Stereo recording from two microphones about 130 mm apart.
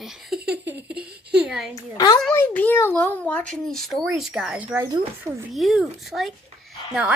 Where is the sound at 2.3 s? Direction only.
15° left (ahead or behind); by 5.3 s 15° right (ahead or behind).